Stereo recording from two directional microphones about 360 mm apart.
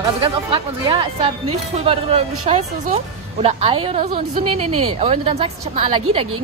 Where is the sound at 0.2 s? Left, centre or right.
Centre.